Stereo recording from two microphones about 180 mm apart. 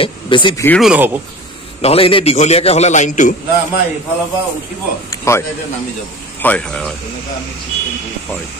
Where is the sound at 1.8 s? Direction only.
35° left (ahead or behind).